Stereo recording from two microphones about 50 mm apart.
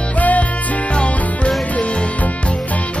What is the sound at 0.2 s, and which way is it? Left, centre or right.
Music, left.